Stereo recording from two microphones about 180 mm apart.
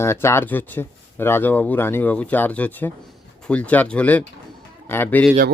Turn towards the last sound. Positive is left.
turn(degrees=10)  # may be behind; listen again after turning